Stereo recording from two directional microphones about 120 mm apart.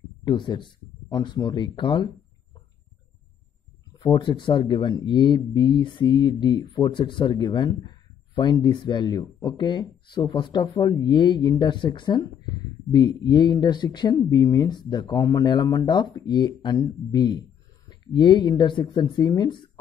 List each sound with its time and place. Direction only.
0.2 s speech: 40° left (ahead or behind)
4.0 s speech: 40° left (ahead or behind)